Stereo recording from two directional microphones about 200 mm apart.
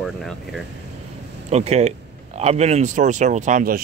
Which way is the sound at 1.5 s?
35° right (ahead or behind).